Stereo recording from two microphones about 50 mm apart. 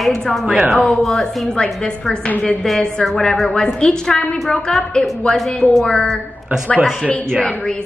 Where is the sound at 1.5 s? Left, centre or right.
Centre.